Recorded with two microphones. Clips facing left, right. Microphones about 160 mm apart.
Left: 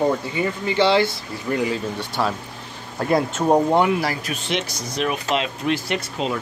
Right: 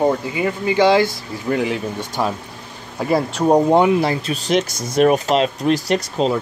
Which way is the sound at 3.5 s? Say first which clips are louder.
Right 4 dB; 15° right (ahead or behind).